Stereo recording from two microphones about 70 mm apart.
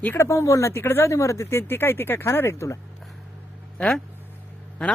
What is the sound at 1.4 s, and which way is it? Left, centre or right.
Speech, left.